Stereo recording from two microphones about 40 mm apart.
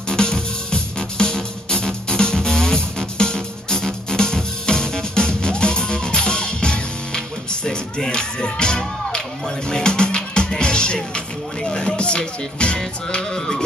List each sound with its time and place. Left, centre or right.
0.1 s music: centre